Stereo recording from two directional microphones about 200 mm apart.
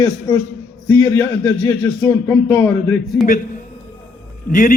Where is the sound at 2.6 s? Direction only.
5° left (ahead or behind).